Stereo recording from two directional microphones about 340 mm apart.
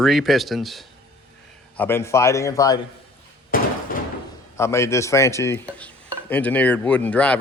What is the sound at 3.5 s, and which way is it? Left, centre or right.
Door, left.